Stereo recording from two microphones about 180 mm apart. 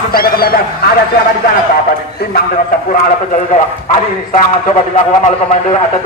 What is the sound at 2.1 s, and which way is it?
Speech, 60° left (ahead or behind).